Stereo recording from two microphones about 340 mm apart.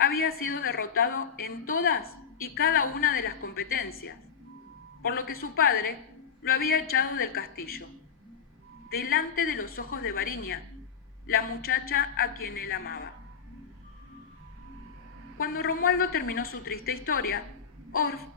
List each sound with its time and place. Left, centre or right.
0.0 s a woman's voice: left
8.9 s a woman's voice: left
15.4 s a woman's voice: left